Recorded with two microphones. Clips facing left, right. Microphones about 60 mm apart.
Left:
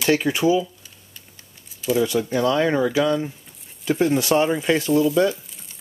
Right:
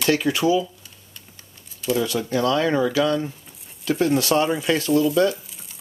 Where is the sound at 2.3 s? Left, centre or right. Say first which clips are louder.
Right 1 dB; left.